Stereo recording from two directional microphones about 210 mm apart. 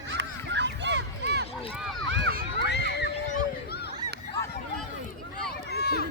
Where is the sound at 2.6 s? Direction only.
55° left (ahead or behind).